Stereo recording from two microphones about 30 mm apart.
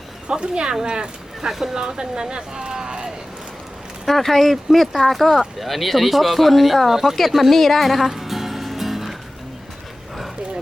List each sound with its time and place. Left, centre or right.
0.3 s speech: right
1.5 s speech: centre
4.0 s speech: centre
7.5 s speech: centre
8.1 s music: centre